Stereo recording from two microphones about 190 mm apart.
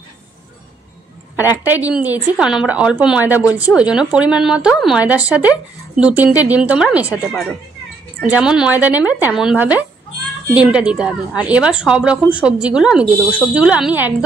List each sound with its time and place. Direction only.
1.3 s speech: 10° right (ahead or behind)